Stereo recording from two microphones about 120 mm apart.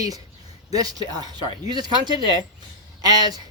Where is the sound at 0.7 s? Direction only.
30° right (ahead or behind).